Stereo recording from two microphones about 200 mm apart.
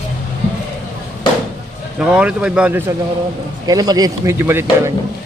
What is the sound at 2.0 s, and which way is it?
Speech, 5° right (ahead or behind).